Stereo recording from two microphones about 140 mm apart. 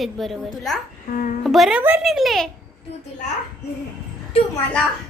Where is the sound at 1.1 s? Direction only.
90° left.